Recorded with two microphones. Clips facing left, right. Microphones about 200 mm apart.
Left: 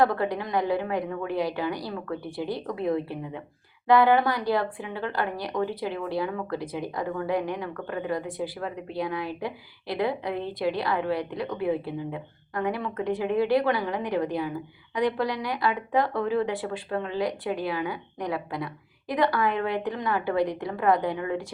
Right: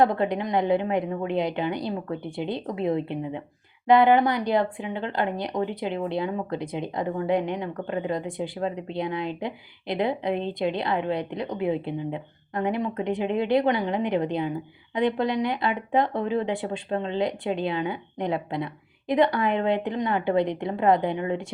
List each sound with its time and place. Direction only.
0.0 s speech: 20° right (ahead or behind)